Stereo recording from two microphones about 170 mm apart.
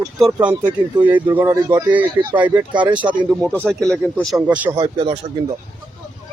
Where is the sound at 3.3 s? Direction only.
Centre (ahead or behind).